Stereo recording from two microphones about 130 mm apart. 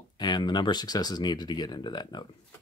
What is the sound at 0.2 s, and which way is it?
Speech, 35° left (ahead or behind).